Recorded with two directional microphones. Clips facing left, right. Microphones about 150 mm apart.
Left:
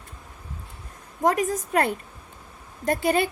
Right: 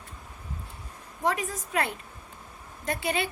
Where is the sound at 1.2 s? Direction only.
45° left (ahead or behind).